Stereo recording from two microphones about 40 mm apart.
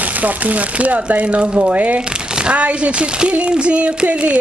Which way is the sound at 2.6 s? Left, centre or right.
Right.